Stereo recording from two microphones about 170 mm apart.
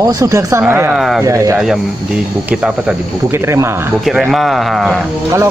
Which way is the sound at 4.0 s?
Centre (ahead or behind).